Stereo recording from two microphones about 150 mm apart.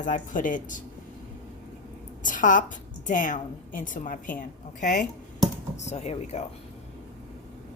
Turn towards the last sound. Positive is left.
turn(degrees=45)  # may be behind; listen again after turning